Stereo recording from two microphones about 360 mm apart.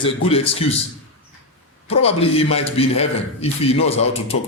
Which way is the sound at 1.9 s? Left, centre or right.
Centre.